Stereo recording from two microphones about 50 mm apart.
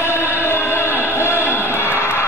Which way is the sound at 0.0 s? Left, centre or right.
Left.